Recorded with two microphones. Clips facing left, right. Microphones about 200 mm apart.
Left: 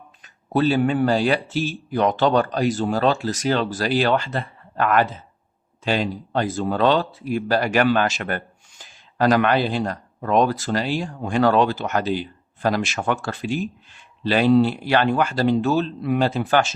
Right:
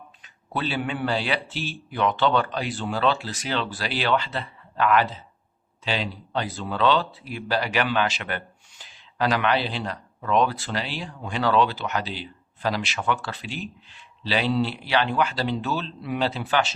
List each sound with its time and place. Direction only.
0.2 s speech: 45° left (ahead or behind)